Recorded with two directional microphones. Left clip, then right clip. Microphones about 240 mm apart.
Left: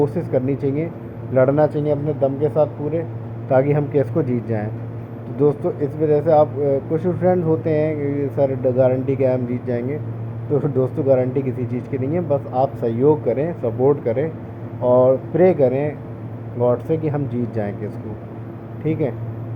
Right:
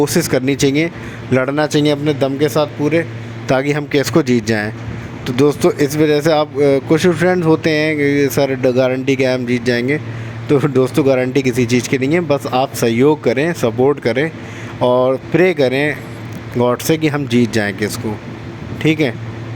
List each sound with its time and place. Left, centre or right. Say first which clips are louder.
0.0 s speech: right 5 dB; right
5.9 s speech: right 3 dB; right
7.1 s speech: right 4 dB; right
7.5 s speech: right 5 dB; right